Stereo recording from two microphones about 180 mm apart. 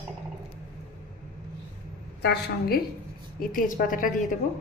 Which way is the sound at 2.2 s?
65° left (ahead or behind).